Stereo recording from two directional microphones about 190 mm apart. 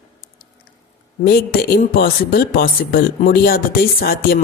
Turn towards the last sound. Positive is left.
turn(degrees=50)  # may be behind; listen again after turning